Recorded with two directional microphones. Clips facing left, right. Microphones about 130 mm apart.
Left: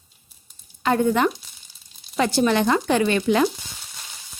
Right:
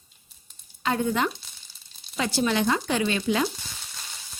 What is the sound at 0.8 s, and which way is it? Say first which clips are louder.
Speech: left 6 dB; 55° left (ahead or behind).